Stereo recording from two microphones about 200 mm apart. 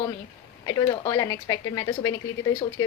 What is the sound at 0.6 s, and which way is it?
A woman's voice, 20° left (ahead or behind).